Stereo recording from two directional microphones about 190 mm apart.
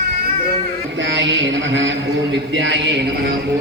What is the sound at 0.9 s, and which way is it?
Mantra, 70° right (ahead or behind).